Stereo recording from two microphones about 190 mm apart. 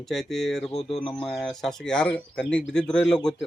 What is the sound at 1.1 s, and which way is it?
Speech, centre (ahead or behind).